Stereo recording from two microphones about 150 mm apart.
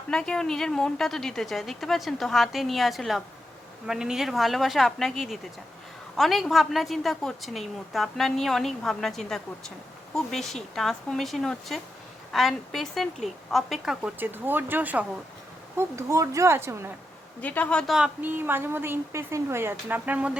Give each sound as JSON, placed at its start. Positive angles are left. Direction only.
{"t": 0.1, "sound": "a woman's voice", "side_deg": 5}
{"t": 17.4, "sound": "a woman's voice", "side_deg": 10}